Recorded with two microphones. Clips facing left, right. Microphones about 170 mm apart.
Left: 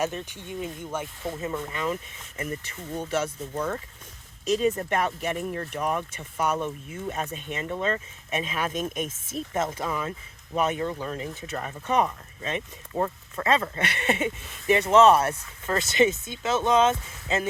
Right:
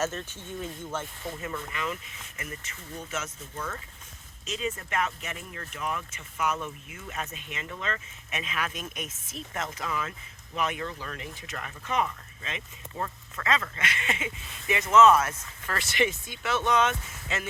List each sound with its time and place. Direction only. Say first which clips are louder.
0.0 s speech: left 2 dB; 15° left (ahead or behind)
1.4 s speech: left 4 dB; 25° left (ahead or behind)
4.7 s speech: left 4 dB; 35° left (ahead or behind)
8.7 s speech: left 9 dB; 45° left (ahead or behind)
9.2 s speech: left 7 dB; 25° left (ahead or behind)